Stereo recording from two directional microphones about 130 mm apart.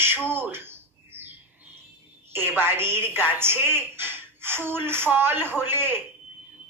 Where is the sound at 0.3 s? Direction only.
15° right (ahead or behind).